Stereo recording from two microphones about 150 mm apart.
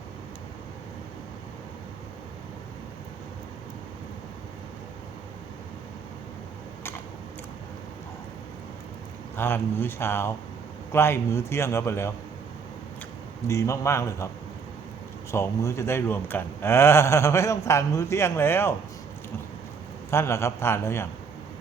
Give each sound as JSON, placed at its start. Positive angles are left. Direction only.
{"t": 9.3, "sound": "a man's voice", "side_deg": 15}
{"t": 13.5, "sound": "a man's voice", "side_deg": 20}
{"t": 15.3, "sound": "a man's voice", "side_deg": 20}
{"t": 20.1, "sound": "a man's voice", "side_deg": 15}